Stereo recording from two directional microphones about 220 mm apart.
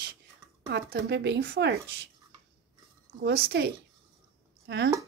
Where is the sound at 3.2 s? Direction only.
50° right (ahead or behind).